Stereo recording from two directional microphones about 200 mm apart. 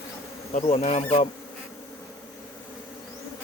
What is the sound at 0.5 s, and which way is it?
Bee, 35° left (ahead or behind).